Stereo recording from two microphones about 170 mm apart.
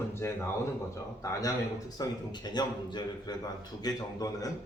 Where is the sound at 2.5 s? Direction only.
25° left (ahead or behind).